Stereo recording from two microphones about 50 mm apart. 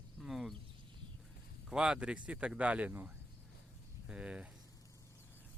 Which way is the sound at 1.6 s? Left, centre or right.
Centre.